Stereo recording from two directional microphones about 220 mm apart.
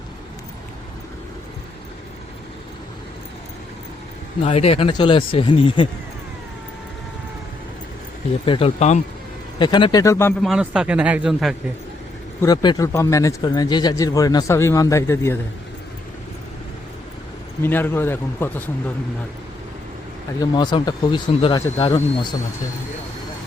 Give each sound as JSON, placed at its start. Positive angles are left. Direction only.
{"t": 4.4, "sound": "speech", "side_deg": 25}
{"t": 8.4, "sound": "speech", "side_deg": 25}
{"t": 10.4, "sound": "speech", "side_deg": -5}
{"t": 12.4, "sound": "speech", "side_deg": 15}
{"t": 17.6, "sound": "speech", "side_deg": 10}
{"t": 20.4, "sound": "speech", "side_deg": 20}